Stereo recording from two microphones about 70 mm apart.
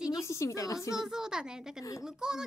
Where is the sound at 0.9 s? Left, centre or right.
Centre.